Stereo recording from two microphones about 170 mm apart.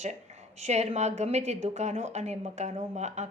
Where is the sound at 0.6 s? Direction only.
40° right (ahead or behind).